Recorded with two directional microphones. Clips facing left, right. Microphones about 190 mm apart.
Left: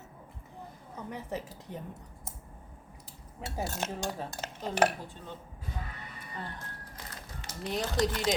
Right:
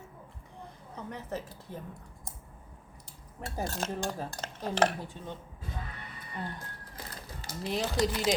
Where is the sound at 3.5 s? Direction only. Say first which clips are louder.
Right 1 dB; 5° left (ahead or behind).